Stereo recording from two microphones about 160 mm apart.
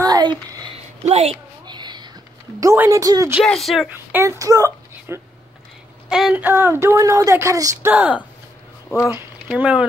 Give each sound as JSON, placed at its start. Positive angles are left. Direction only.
{"t": 0.0, "sound": "a sound", "side_deg": -25}
{"t": 1.0, "sound": "a child's voice", "side_deg": -45}
{"t": 1.7, "sound": "a sound", "side_deg": -25}
{"t": 2.6, "sound": "speech", "side_deg": -20}
{"t": 3.3, "sound": "speech", "side_deg": 0}
{"t": 4.1, "sound": "a woman's voice", "side_deg": -20}
{"t": 6.0, "sound": "speech", "side_deg": -5}
{"t": 7.9, "sound": "speech", "side_deg": -10}
{"t": 8.9, "sound": "speech", "side_deg": 15}
{"t": 9.6, "sound": "speech", "side_deg": -10}